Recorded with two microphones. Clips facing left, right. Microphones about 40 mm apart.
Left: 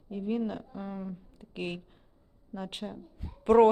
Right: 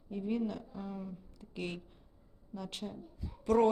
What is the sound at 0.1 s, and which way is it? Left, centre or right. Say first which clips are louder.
A woman's voice: left 3 dB; centre.